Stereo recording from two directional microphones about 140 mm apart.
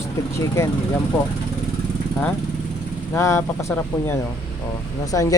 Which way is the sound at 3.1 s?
20° left (ahead or behind).